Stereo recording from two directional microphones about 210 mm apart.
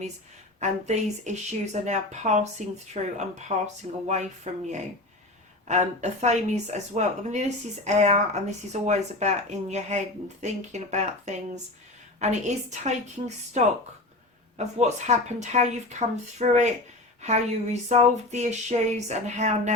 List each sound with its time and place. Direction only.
0.6 s speech: 35° right (ahead or behind)
5.6 s speech: 35° right (ahead or behind)
14.6 s speech: 35° right (ahead or behind)